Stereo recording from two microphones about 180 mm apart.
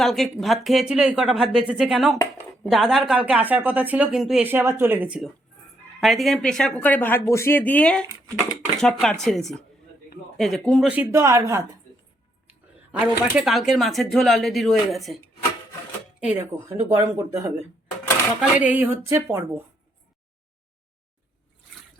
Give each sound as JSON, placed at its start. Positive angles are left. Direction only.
{"t": 0.0, "sound": "speech", "side_deg": 0}
{"t": 13.3, "sound": "speech", "side_deg": 0}
{"t": 16.2, "sound": "speech", "side_deg": -10}